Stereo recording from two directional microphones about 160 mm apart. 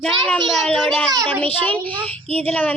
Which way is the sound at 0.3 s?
Centre (ahead or behind).